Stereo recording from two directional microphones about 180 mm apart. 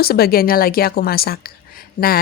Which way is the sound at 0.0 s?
60° left (ahead or behind).